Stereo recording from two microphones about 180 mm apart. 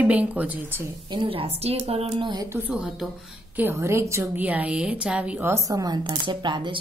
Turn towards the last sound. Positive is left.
turn(degrees=-25)  # may be behind; listen again after turning